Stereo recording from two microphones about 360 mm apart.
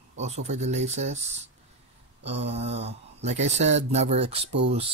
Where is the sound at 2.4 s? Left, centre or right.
Centre.